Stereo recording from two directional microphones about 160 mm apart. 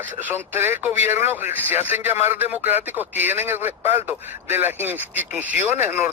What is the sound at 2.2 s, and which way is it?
A man's voice, 10° right (ahead or behind).